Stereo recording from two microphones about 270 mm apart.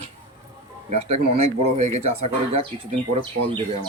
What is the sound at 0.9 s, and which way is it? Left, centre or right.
Speech, right.